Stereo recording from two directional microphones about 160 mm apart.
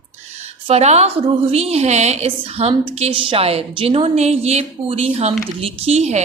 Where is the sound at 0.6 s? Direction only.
40° right (ahead or behind).